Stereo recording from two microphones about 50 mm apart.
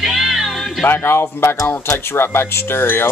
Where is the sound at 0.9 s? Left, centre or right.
Left.